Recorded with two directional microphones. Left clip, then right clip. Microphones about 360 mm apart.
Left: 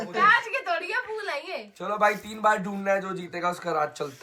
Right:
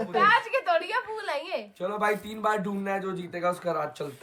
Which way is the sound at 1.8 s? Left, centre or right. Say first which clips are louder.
Left 4 dB; centre.